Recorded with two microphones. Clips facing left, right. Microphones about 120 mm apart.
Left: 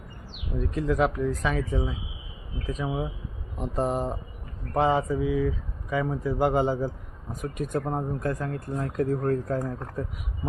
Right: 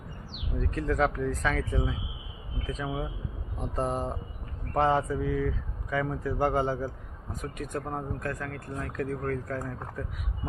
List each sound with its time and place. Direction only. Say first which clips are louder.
0.6 s speech: left 3 dB; 10° left (ahead or behind); by 9.7 s 25° left (ahead or behind)